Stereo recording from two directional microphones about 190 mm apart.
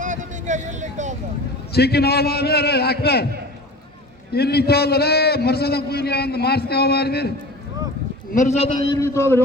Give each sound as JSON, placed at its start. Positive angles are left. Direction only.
{"t": 0.0, "sound": "vehicle", "side_deg": -40}
{"t": 1.7, "sound": "a man's voice", "side_deg": 55}
{"t": 4.3, "sound": "a man's voice", "side_deg": 55}
{"t": 8.3, "sound": "a man's voice", "side_deg": 40}
{"t": 9.0, "sound": "a man's voice", "side_deg": 15}